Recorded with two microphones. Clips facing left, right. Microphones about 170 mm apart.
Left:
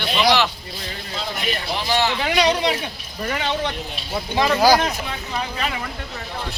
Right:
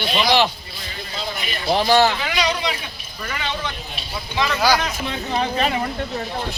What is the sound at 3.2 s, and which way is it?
Speech, 45° left (ahead or behind).